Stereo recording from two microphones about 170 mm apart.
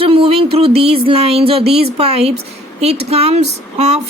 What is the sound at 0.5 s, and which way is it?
A woman's voice, 35° right (ahead or behind).